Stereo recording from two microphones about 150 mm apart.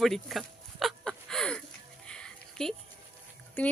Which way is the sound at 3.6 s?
10° left (ahead or behind).